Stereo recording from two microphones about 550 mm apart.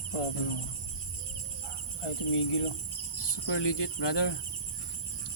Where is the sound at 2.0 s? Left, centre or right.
Left.